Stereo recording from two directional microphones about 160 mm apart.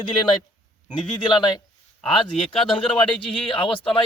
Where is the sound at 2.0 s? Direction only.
Centre (ahead or behind).